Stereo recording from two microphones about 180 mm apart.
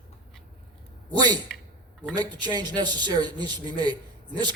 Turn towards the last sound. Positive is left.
turn(degrees=-25)  # may be behind; listen again after turning